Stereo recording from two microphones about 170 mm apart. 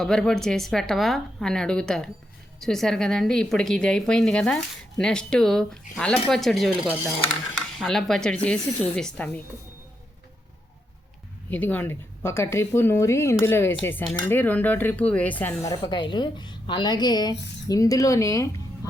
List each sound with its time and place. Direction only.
0.0 s a woman's voice: 5° left (ahead or behind)
11.5 s speech: 10° left (ahead or behind)
15.7 s a woman's voice: 25° left (ahead or behind)